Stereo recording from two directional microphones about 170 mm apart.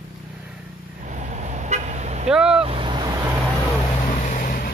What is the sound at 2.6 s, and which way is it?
Boat, 30° right (ahead or behind).